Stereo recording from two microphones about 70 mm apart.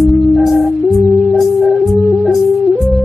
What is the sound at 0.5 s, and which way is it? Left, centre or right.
Music, centre.